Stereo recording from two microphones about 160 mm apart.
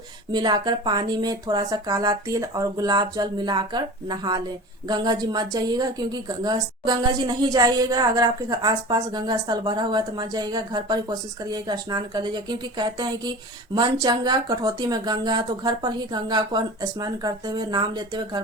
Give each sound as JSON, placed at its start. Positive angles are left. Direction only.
{"t": 0.3, "sound": "a woman's voice", "side_deg": -25}